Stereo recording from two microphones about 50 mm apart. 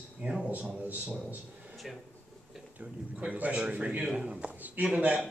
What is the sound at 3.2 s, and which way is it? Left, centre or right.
A man's voice, right.